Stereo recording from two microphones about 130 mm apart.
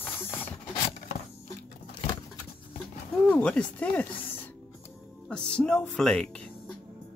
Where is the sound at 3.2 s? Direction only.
10° left (ahead or behind).